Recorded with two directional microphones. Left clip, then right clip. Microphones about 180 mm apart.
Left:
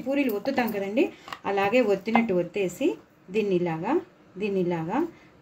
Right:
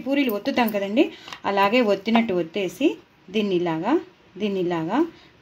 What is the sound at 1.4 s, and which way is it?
Speech, 50° right (ahead or behind).